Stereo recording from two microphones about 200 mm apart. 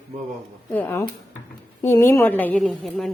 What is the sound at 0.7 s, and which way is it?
A woman's voice, 10° left (ahead or behind).